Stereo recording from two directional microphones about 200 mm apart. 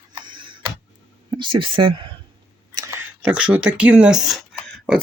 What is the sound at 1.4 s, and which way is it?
Speech, 25° right (ahead or behind).